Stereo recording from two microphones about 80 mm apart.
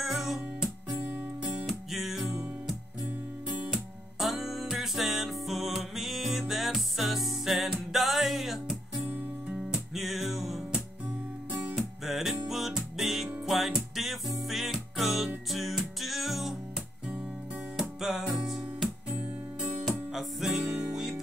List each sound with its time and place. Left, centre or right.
0.0 s music: centre
0.9 s music: centre
1.7 s music: centre
3.7 s music: centre
17.7 s music: centre